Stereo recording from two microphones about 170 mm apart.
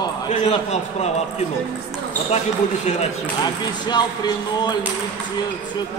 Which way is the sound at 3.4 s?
25° left (ahead or behind).